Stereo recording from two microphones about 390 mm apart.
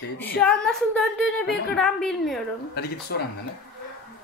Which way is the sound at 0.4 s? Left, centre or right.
Centre.